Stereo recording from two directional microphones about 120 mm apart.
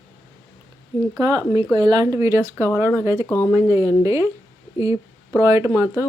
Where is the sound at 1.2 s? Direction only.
30° right (ahead or behind).